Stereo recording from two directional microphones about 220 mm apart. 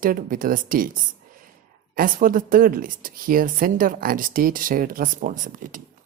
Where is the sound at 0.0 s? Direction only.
40° right (ahead or behind).